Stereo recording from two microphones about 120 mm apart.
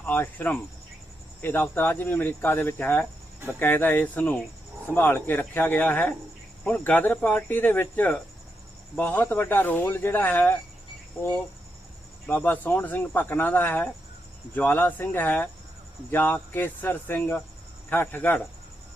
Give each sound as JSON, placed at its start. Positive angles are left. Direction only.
{"t": 0.0, "sound": "speech", "side_deg": 15}
{"t": 12.2, "sound": "speech", "side_deg": 15}